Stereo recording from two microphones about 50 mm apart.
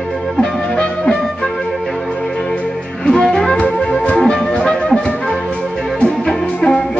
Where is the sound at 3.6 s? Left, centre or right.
Left.